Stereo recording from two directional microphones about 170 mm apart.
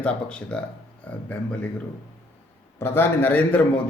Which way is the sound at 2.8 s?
10° left (ahead or behind).